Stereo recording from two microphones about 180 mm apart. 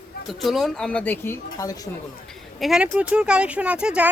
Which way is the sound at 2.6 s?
5° right (ahead or behind).